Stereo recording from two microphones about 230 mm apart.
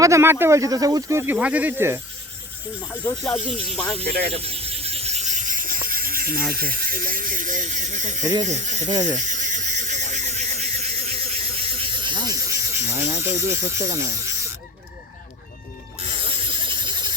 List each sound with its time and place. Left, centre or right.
0.0 s speech: centre
3.0 s speech: centre
4.3 s vehicle: right
6.5 s speech: right
8.2 s speech: centre
8.4 s speech: right
9.1 s a sound: right; by 13.1 s centre
13.1 s speech: centre
16.0 s insect: right